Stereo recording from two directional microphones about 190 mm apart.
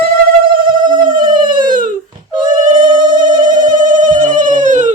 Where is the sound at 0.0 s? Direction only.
50° right (ahead or behind).